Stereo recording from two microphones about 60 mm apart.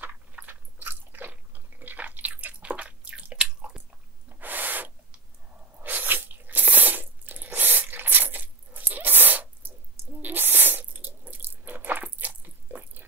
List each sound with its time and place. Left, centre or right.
0.0 s biting: right; by 3.8 s centre
4.4 s owl: right
5.8 s a sound: right